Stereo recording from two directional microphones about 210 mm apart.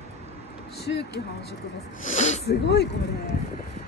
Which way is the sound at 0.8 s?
55° left (ahead or behind).